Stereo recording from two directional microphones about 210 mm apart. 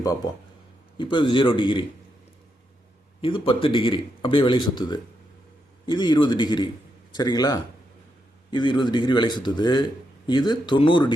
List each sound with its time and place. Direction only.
0.2 s speech: 20° left (ahead or behind)
3.2 s speech: 25° left (ahead or behind)